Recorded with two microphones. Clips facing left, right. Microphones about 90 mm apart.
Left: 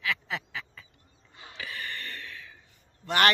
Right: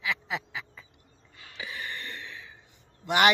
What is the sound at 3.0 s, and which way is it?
Speech, 15° right (ahead or behind).